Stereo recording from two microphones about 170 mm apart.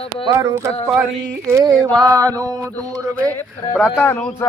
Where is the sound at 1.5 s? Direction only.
15° right (ahead or behind).